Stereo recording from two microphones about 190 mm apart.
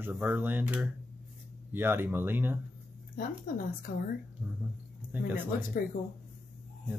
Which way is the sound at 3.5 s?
45° left (ahead or behind).